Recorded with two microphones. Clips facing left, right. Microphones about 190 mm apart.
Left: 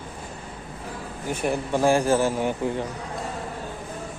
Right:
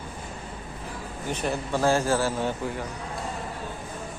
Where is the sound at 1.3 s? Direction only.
10° left (ahead or behind).